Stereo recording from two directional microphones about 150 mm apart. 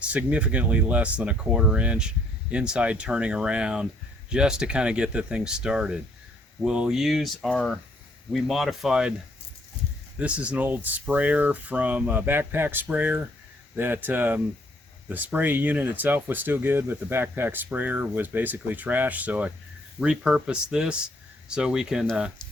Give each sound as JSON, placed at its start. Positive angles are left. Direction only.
{"t": 0.0, "sound": "speech", "side_deg": -10}
{"t": 10.2, "sound": "speech", "side_deg": -10}